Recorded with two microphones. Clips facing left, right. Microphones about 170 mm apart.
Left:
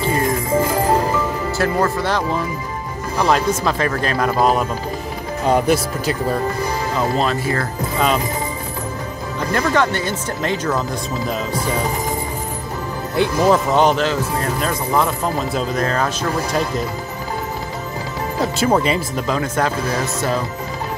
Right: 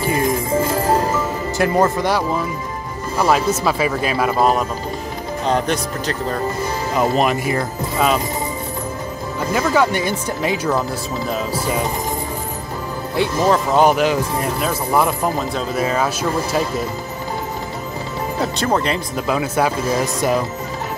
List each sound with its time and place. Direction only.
1.6 s speech: 15° right (ahead or behind); by 6.4 s 10° left (ahead or behind)
7.0 s speech: 15° right (ahead or behind)
9.4 s speech: 5° right (ahead or behind)
13.1 s speech: centre (ahead or behind)
18.4 s speech: 5° left (ahead or behind)
19.2 s speech: 10° right (ahead or behind)